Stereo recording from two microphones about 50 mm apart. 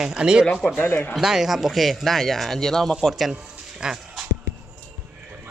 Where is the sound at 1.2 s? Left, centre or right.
Centre.